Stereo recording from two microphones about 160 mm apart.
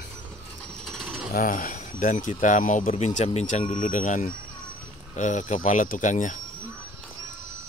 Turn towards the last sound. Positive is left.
turn(degrees=50)  # may be behind; listen again after turning